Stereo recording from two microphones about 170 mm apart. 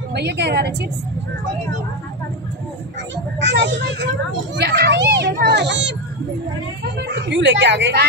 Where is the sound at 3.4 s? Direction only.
90° right.